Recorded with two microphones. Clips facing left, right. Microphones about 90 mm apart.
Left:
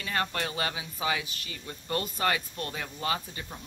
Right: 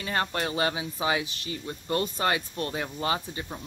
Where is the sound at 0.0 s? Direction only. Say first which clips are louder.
Right 2 dB; 30° right (ahead or behind).